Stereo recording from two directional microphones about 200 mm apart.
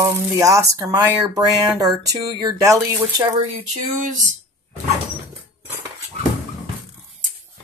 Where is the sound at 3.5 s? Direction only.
40° right (ahead or behind).